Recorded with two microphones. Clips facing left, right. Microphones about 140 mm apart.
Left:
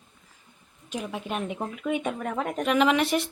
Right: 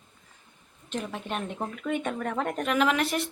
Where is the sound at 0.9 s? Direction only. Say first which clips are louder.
Left 1 dB; 10° left (ahead or behind).